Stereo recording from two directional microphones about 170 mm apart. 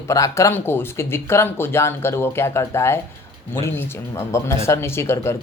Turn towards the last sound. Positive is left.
turn(degrees=15)  # may be behind; listen again after turning